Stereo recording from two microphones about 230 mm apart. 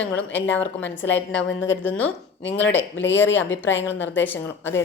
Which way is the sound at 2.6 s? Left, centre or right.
Left.